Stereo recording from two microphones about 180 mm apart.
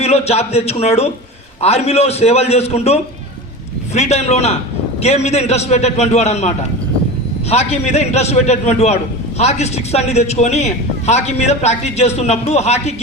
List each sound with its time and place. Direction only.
0.0 s a man's voice: 35° left (ahead or behind)
7.5 s a man's voice: 35° left (ahead or behind)